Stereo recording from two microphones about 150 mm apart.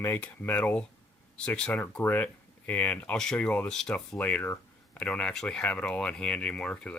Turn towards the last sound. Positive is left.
turn(degrees=10)  # may be behind; listen again after turning